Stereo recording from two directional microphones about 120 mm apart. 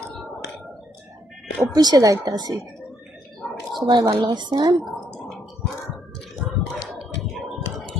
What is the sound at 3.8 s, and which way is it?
Speech, 35° right (ahead or behind).